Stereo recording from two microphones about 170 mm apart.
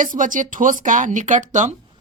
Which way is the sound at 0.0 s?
50° right (ahead or behind).